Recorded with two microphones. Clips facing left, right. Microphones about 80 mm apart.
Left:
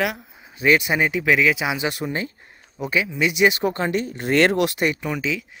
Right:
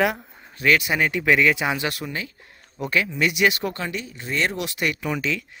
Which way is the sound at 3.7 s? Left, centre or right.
Left.